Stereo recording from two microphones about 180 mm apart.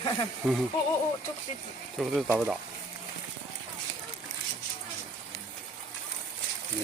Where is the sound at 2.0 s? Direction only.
Centre (ahead or behind).